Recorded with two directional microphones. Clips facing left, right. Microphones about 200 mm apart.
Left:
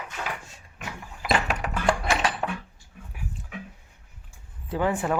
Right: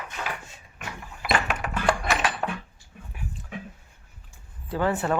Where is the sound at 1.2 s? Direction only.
30° left (ahead or behind).